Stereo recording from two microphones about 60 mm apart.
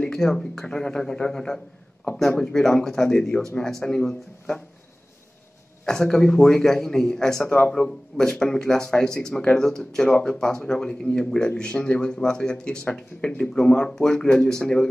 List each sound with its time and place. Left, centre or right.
0.0 s speech: centre
5.9 s speech: centre
7.4 s speech: left
7.7 s speech: centre